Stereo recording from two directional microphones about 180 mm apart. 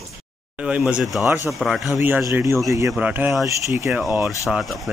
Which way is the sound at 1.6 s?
Centre (ahead or behind).